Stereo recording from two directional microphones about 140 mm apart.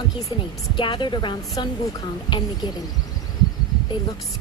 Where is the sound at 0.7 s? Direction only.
35° left (ahead or behind).